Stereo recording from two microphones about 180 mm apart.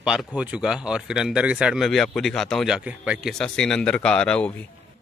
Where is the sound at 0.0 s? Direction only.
5° right (ahead or behind).